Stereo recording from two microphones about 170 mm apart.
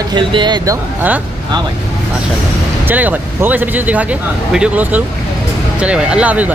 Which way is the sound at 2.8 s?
10° right (ahead or behind).